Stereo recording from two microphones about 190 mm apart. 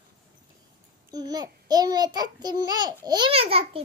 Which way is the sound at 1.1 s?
20° right (ahead or behind).